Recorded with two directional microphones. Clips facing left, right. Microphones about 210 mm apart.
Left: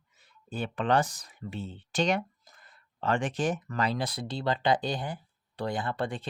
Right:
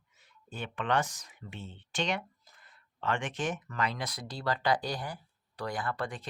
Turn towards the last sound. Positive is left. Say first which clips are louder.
# left 3 dB
turn(degrees=30)  # may be behind; listen again after turning